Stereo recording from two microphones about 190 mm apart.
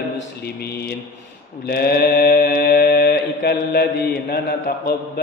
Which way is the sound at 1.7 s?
55° left (ahead or behind).